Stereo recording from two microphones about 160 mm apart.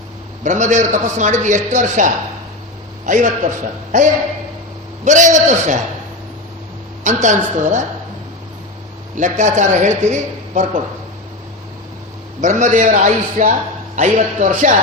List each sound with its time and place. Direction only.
0.4 s a man's voice: 50° right (ahead or behind)
7.0 s a man's voice: 50° right (ahead or behind)
9.1 s a man's voice: 50° right (ahead or behind)
12.4 s a man's voice: 50° right (ahead or behind)